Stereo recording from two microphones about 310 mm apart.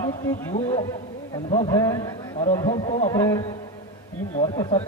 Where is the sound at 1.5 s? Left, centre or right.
Centre.